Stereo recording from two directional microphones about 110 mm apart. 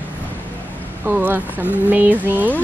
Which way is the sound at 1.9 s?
15° right (ahead or behind).